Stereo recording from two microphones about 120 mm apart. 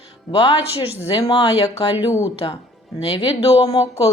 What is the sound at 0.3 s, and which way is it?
Speech, 40° left (ahead or behind).